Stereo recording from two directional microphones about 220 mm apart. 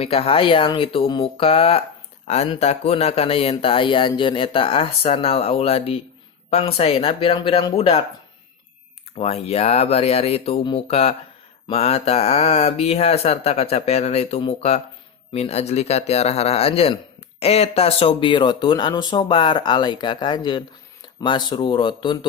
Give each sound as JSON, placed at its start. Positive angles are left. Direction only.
{"t": 0.0, "sound": "speech", "side_deg": 25}
{"t": 9.1, "sound": "speech", "side_deg": 30}